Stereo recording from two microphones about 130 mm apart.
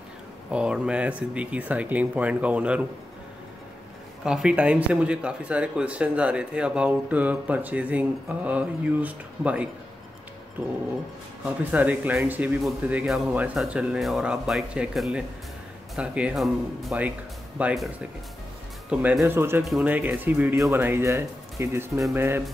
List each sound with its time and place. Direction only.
0.5 s speech: 10° right (ahead or behind)
4.2 s speech: 5° right (ahead or behind)
11.4 s speech: 10° right (ahead or behind)
18.9 s speech: 10° right (ahead or behind)